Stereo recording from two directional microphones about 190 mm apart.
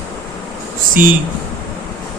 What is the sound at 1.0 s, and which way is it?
Speech, 10° right (ahead or behind).